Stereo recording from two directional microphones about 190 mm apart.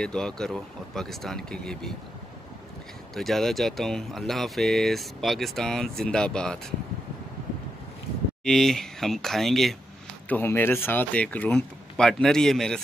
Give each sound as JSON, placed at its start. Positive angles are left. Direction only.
{"t": 0.0, "sound": "speech", "side_deg": 5}
{"t": 3.2, "sound": "speech", "side_deg": 0}
{"t": 8.5, "sound": "speech", "side_deg": 0}